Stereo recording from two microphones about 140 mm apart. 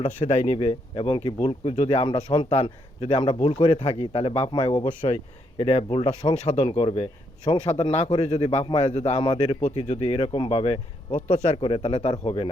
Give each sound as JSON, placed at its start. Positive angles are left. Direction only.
{"t": 0.2, "sound": "speech", "side_deg": 40}
{"t": 4.8, "sound": "speech", "side_deg": 55}
{"t": 5.5, "sound": "speech", "side_deg": 40}
{"t": 9.1, "sound": "speech", "side_deg": 40}
{"t": 9.4, "sound": "speech", "side_deg": 55}
{"t": 11.3, "sound": "speech", "side_deg": 55}
{"t": 11.5, "sound": "speech", "side_deg": 40}